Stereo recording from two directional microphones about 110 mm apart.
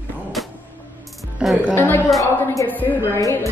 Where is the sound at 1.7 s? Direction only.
20° left (ahead or behind).